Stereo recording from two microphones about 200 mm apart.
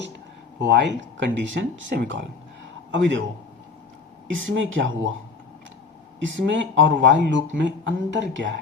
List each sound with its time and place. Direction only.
0.6 s a man's voice: 60° right (ahead or behind)
4.3 s speech: 70° right (ahead or behind)
6.1 s speech: 65° right (ahead or behind)